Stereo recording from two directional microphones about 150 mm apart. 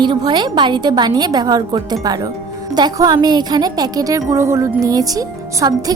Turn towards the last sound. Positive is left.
turn(degrees=-25)  # may be behind; listen again after turning